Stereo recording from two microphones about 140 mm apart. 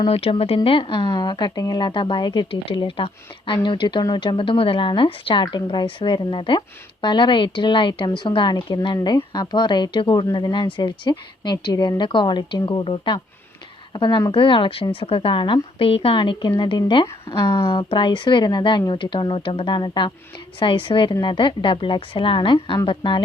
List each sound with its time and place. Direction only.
0.0 s speech: 45° left (ahead or behind)